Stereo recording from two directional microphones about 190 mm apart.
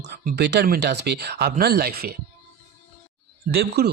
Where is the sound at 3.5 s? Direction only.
60° right (ahead or behind).